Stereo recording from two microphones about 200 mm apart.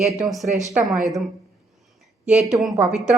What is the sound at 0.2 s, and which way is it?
A woman's voice, centre (ahead or behind).